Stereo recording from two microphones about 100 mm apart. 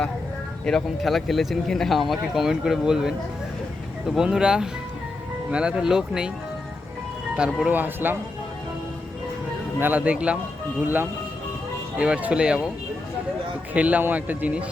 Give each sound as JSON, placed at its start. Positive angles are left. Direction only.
{"t": 0.6, "sound": "speech", "side_deg": 5}
{"t": 7.3, "sound": "speech", "side_deg": -10}
{"t": 9.8, "sound": "speech", "side_deg": -15}
{"t": 13.7, "sound": "speech", "side_deg": -15}